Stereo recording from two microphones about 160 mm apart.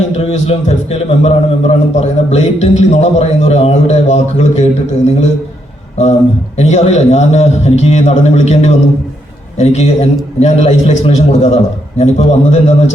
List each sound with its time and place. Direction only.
0.1 s a man's voice: 40° left (ahead or behind)
6.6 s a man's voice: 45° left (ahead or behind)